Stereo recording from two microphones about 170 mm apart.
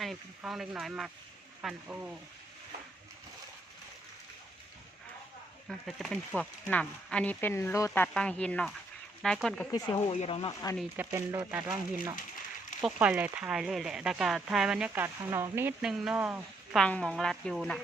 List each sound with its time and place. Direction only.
0.0 s speech: centre (ahead or behind)
5.6 s speech: centre (ahead or behind)
10.1 s speech: 35° left (ahead or behind)
10.9 s speech: 15° right (ahead or behind)
15.8 s speech: 5° right (ahead or behind)
16.7 s speech: 5° left (ahead or behind)